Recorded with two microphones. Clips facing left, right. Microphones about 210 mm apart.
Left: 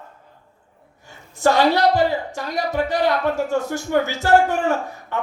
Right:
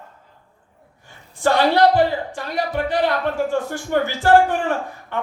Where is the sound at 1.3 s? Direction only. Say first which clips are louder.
Left 1 dB; 45° left (ahead or behind).